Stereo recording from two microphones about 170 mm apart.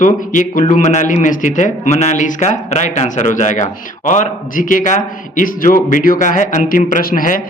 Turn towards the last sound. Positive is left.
turn(degrees=55)  # may be behind; listen again after turning